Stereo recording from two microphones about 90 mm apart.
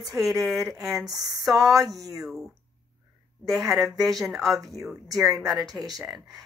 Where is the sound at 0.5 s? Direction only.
Centre (ahead or behind).